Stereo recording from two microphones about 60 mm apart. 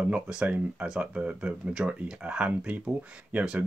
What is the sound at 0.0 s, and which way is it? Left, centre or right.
Speech, centre.